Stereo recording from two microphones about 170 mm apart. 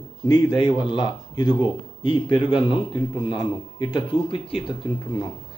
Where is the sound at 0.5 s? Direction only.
25° left (ahead or behind).